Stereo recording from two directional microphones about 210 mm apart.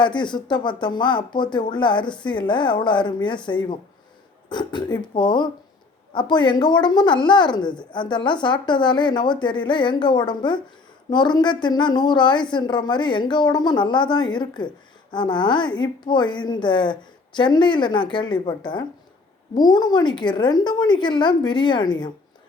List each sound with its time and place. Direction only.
0.0 s a woman's voice: 20° left (ahead or behind)